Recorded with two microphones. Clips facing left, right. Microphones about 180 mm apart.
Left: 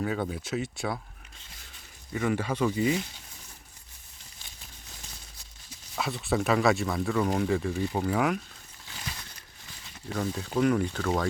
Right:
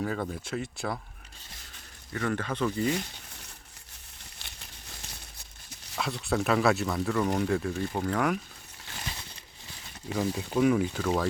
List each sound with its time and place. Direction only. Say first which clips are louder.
0.0 s speech: left 1 dB; 5° left (ahead or behind)
2.1 s speech: left 2 dB; 10° left (ahead or behind)
4.4 s a sound: right 1 dB; 70° right (ahead or behind)
6.0 s speech: left 1 dB; centre (ahead or behind)
10.2 s speech: right 1 dB; 5° right (ahead or behind)